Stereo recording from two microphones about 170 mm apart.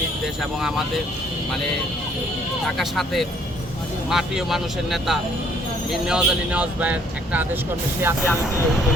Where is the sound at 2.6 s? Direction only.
Centre (ahead or behind).